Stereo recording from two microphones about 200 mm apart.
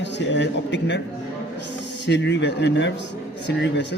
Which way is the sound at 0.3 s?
60° left (ahead or behind).